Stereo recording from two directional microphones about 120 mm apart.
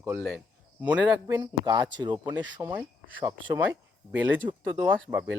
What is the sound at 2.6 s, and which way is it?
Speech, 15° right (ahead or behind).